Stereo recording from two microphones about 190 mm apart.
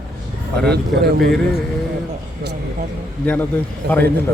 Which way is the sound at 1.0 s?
55° right (ahead or behind).